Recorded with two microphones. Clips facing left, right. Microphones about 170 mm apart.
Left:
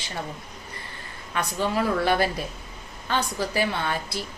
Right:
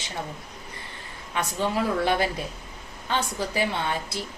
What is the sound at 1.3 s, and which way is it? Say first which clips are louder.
A woman's voice: left 1 dB; 20° right (ahead or behind).